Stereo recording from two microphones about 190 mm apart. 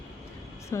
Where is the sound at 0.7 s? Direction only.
15° left (ahead or behind).